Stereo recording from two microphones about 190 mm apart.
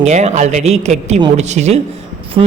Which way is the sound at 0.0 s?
35° right (ahead or behind).